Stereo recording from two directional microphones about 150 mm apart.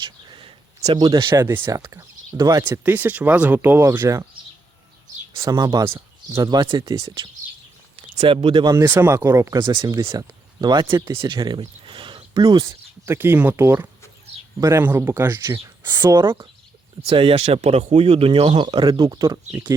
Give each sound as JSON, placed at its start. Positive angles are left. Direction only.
{"t": 0.3, "sound": "a sound", "side_deg": -35}
{"t": 0.9, "sound": "speech", "side_deg": -30}
{"t": 1.4, "sound": "speech", "side_deg": -15}
{"t": 2.6, "sound": "speech", "side_deg": -10}
{"t": 5.4, "sound": "speech", "side_deg": -25}
{"t": 6.5, "sound": "speech", "side_deg": -30}
{"t": 8.7, "sound": "speech", "side_deg": -15}
{"t": 9.6, "sound": "speech", "side_deg": -30}
{"t": 16.0, "sound": "speech", "side_deg": -30}
{"t": 19.5, "sound": "speech", "side_deg": -15}